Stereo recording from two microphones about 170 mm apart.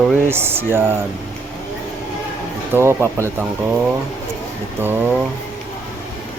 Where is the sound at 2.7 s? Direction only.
15° right (ahead or behind).